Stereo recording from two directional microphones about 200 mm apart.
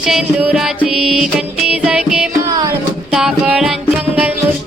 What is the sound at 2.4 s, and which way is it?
Music, 15° right (ahead or behind).